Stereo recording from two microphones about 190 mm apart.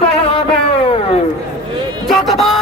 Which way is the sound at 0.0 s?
30° left (ahead or behind).